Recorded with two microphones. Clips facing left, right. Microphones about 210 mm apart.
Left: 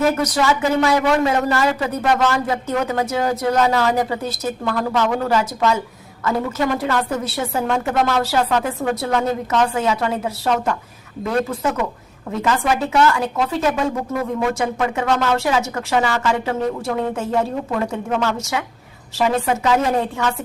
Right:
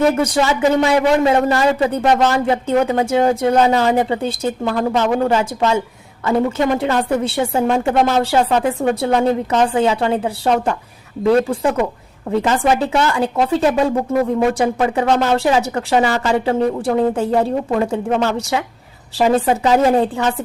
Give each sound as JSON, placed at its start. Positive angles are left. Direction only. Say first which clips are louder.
{"t": 0.2, "sound": "speech", "louder": "right 3 dB", "side_deg": -30}